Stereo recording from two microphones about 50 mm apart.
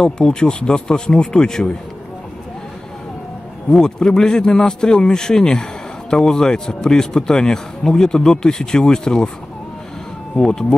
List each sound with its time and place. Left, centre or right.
0.0 s a man's voice: centre
3.7 s a man's voice: centre
10.4 s a man's voice: centre